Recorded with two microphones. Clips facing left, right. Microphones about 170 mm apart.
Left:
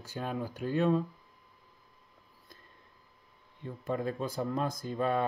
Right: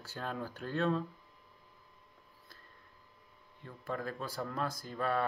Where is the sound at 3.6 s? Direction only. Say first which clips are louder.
Left 6 dB; 20° left (ahead or behind).